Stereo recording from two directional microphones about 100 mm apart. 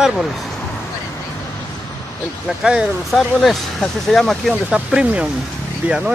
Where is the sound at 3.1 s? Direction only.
Centre (ahead or behind).